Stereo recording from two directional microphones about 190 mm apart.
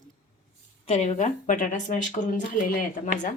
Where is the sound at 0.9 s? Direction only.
35° left (ahead or behind).